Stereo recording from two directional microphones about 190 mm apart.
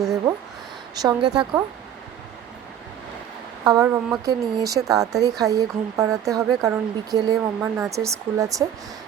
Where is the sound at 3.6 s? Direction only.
15° right (ahead or behind).